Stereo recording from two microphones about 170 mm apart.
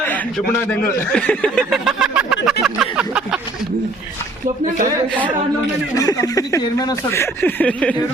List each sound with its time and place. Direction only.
0.4 s speech: 15° left (ahead or behind); by 3.4 s 5° right (ahead or behind)
6.0 s speech: 20° left (ahead or behind)